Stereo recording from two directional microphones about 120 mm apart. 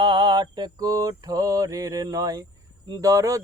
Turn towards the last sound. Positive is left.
turn(degrees=-25)  # may be behind; listen again after turning